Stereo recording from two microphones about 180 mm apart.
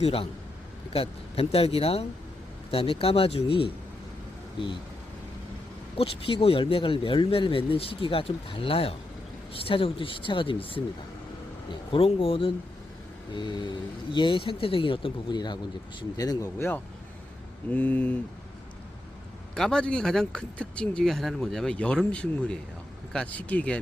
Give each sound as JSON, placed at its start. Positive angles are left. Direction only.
{"t": 0.0, "sound": "speech", "side_deg": 30}
{"t": 6.0, "sound": "speech", "side_deg": 30}
{"t": 11.9, "sound": "speech", "side_deg": 30}
{"t": 19.5, "sound": "speech", "side_deg": 5}